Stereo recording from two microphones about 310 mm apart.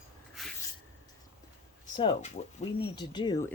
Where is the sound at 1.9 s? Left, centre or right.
Left.